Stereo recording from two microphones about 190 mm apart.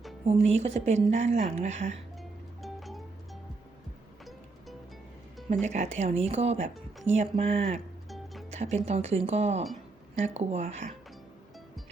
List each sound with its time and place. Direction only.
0.3 s speech: 35° right (ahead or behind)
2.6 s music: centre (ahead or behind)
5.5 s speech: 35° right (ahead or behind)
8.1 s music: centre (ahead or behind)
8.4 s speech: 35° right (ahead or behind)